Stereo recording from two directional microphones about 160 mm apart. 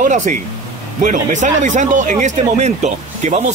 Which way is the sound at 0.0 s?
50° right (ahead or behind).